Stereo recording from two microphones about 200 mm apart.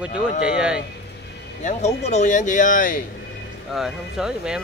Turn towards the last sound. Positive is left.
turn(degrees=-5)  # may be behind; listen again after turning